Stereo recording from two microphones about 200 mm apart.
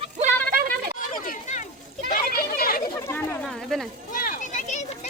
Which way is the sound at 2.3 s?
50° left (ahead or behind).